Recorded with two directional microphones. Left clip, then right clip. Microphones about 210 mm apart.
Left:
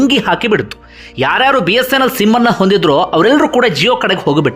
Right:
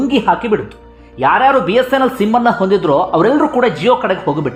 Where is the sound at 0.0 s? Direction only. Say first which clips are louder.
Left 2 dB; 15° left (ahead or behind).